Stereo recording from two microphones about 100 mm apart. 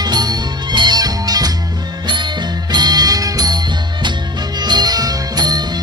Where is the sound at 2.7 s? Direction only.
45° right (ahead or behind).